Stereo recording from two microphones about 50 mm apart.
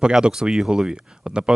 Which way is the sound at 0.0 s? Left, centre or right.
Centre.